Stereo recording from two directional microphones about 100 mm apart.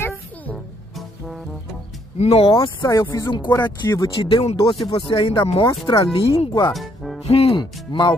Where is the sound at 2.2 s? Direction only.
85° left.